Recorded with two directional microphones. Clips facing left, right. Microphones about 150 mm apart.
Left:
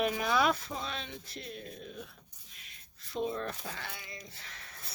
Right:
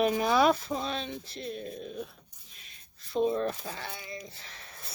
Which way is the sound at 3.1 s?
30° right (ahead or behind).